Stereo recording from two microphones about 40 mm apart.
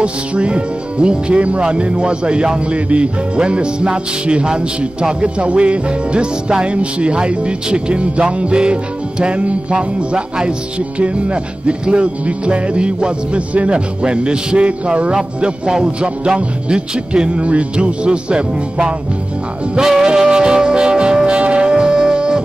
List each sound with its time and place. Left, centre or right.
0.0 s music: right
9.8 s music: right